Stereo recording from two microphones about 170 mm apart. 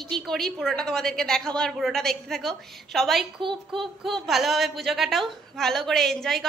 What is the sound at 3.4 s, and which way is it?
Speech, 30° right (ahead or behind).